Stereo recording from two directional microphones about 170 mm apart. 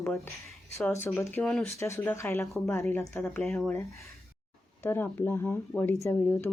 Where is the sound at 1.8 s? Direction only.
15° left (ahead or behind).